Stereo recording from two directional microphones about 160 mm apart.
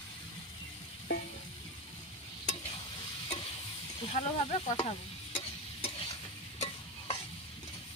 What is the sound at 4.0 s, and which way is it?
Speech, 40° left (ahead or behind).